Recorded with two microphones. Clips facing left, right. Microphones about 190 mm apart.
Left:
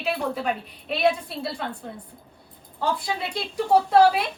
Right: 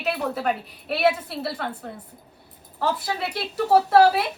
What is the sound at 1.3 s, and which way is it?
Speech, 65° right (ahead or behind).